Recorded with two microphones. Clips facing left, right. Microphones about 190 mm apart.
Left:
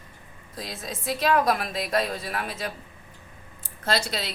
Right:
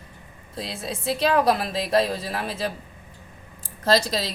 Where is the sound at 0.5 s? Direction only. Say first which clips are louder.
Right 4 dB; 30° right (ahead or behind).